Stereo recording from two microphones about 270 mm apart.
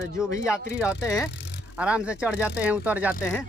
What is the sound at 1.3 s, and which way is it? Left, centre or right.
Bicycle, left.